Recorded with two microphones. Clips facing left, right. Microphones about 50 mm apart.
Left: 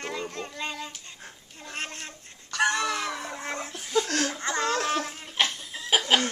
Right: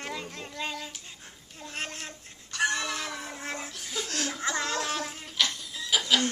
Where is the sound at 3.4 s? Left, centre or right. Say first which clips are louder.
Left 1 dB; centre.